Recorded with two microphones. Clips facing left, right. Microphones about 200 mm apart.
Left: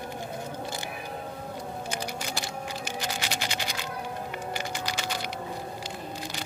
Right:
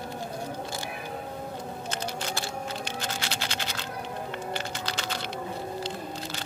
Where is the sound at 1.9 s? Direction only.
15° left (ahead or behind).